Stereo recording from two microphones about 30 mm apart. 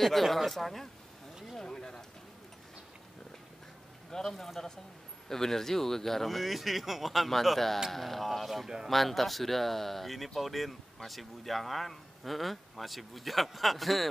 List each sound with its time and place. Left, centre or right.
0.0 s speech: centre
1.6 s a sound: left
4.1 s a man's voice: centre